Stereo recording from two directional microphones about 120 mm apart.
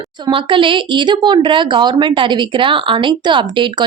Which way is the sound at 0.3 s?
45° right (ahead or behind).